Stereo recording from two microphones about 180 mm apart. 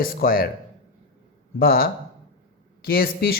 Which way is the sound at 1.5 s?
55° left (ahead or behind).